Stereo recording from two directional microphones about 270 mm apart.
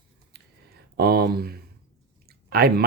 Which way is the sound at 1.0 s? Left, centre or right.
Right.